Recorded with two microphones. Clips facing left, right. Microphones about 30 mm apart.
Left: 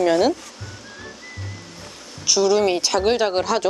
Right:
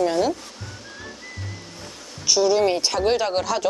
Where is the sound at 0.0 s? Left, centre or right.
Left.